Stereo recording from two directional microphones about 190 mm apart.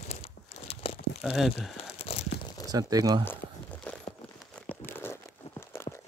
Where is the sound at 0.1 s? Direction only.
35° left (ahead or behind).